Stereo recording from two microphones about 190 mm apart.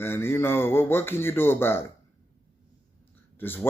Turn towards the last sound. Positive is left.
turn(degrees=10)  # may be behind; listen again after turning